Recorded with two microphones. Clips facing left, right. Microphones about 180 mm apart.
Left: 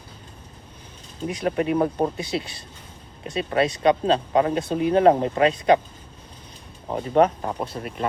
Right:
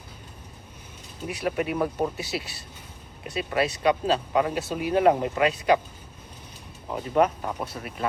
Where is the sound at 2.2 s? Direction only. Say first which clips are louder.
Left 4 dB; 5° right (ahead or behind).